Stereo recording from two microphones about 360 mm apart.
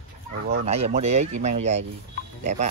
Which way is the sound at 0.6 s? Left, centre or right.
Centre.